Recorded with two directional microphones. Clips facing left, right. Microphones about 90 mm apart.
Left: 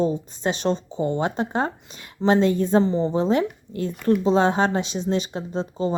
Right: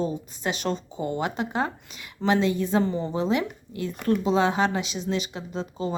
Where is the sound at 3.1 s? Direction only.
35° left (ahead or behind).